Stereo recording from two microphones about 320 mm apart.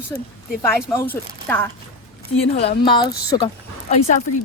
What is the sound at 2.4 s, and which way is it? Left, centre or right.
Speech, centre.